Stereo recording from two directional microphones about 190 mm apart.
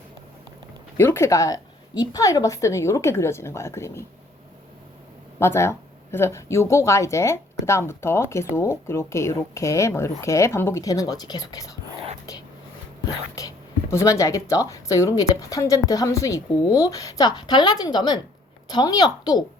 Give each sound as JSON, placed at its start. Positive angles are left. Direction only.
{"t": 0.9, "sound": "a woman's voice", "side_deg": 10}
{"t": 5.4, "sound": "a woman's voice", "side_deg": 15}
{"t": 13.9, "sound": "a woman's voice", "side_deg": 15}